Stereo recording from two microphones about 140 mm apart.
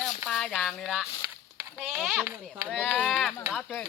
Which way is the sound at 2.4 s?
10° left (ahead or behind).